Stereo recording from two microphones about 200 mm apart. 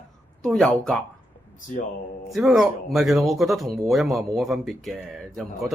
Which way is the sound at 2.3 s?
Centre (ahead or behind).